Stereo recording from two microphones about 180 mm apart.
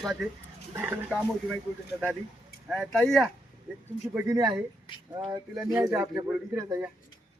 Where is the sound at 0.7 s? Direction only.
15° right (ahead or behind).